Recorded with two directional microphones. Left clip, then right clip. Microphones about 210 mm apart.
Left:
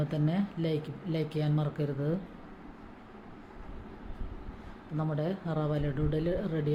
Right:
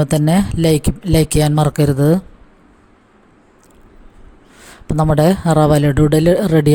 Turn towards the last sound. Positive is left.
turn(degrees=-50)  # may be behind; listen again after turning